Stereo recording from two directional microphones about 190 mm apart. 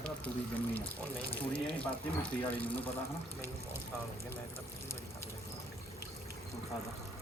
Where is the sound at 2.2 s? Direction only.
10° left (ahead or behind).